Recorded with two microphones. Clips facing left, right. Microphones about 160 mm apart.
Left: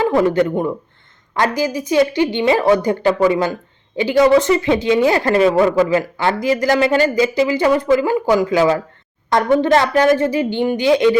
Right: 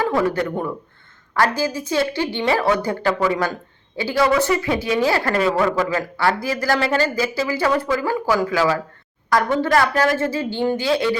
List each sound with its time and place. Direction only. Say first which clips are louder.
0.0 s a woman's voice: left 5 dB; 20° left (ahead or behind)